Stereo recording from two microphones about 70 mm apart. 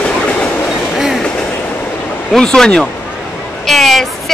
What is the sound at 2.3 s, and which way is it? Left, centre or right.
Speech, centre.